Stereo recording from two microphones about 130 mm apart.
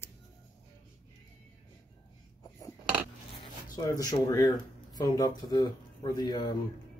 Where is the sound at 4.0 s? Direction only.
30° left (ahead or behind).